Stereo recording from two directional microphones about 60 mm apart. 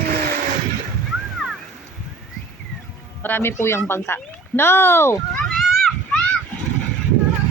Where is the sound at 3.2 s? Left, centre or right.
Left.